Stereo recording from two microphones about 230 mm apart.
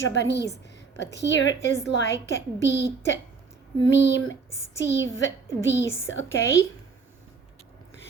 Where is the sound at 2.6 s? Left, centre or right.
Left.